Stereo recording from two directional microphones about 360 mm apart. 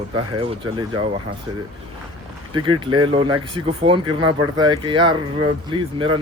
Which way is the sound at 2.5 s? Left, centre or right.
Centre.